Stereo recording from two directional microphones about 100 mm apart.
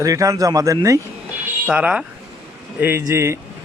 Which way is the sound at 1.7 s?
10° right (ahead or behind).